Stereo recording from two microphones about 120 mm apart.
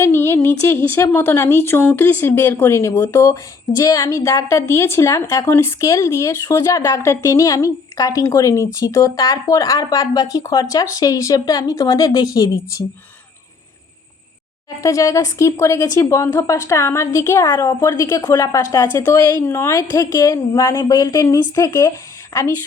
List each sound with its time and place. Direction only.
0.0 s a woman's voice: 20° left (ahead or behind)
14.8 s a woman's voice: 30° left (ahead or behind)